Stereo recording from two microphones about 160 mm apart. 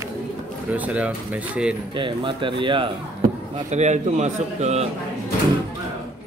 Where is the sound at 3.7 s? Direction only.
45° right (ahead or behind).